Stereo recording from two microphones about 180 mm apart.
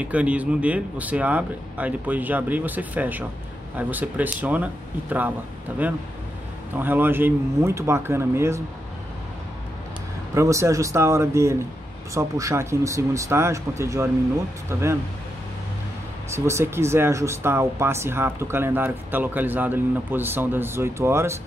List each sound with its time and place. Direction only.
0.0 s speech: 5° right (ahead or behind)
5.8 s speech: 10° right (ahead or behind)
10.3 s speech: 15° right (ahead or behind)
16.3 s speech: 15° right (ahead or behind)